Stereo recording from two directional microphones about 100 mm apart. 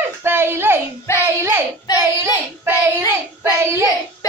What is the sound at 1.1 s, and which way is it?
Child singing, 25° left (ahead or behind).